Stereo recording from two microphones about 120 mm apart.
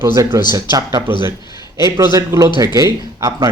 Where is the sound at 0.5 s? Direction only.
30° right (ahead or behind).